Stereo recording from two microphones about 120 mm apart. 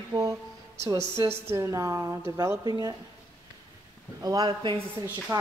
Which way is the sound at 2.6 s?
30° right (ahead or behind).